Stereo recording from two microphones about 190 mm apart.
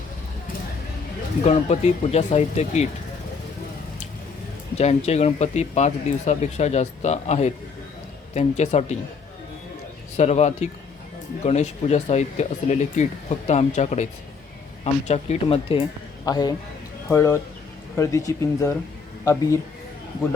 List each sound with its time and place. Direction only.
1.5 s speech: 35° left (ahead or behind)
4.8 s speech: 35° left (ahead or behind)
10.2 s speech: 35° left (ahead or behind); by 19.5 s 15° left (ahead or behind)